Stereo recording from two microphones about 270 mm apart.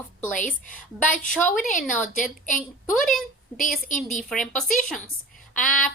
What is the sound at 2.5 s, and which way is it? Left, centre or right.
A woman's voice, centre.